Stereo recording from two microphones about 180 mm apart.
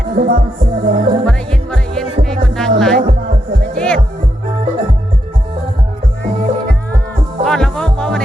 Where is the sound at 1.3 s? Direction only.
5° left (ahead or behind).